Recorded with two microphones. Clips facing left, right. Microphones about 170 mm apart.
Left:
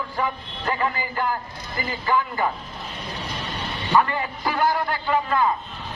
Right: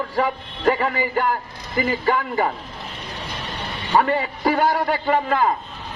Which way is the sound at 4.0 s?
60° right (ahead or behind).